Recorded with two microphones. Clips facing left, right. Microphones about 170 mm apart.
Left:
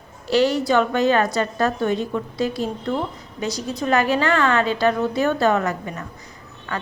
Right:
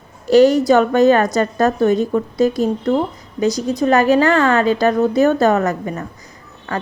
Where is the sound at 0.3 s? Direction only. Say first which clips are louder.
Right 8 dB; 45° right (ahead or behind).